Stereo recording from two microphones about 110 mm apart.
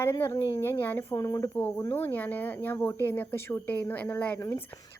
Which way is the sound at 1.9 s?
20° left (ahead or behind).